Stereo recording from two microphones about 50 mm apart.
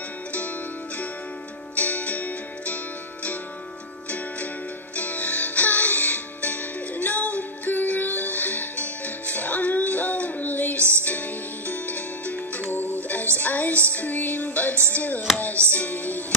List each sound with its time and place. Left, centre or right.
0.3 s music: left
4.9 s music: left